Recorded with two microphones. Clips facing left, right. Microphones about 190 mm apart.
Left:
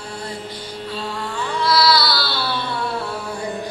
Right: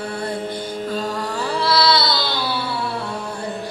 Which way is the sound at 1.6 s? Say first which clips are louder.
Left 1 dB; 30° right (ahead or behind).